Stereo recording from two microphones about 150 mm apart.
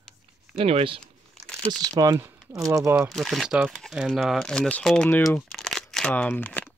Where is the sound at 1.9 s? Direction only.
25° right (ahead or behind).